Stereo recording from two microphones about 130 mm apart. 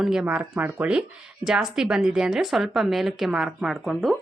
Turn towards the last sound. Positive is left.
turn(degrees=-5)  # may be behind; listen again after turning